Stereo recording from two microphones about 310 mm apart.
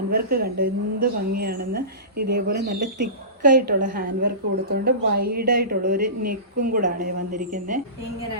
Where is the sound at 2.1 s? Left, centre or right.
Right.